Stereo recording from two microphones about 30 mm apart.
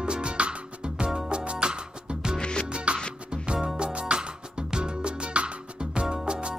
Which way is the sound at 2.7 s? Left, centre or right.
Right.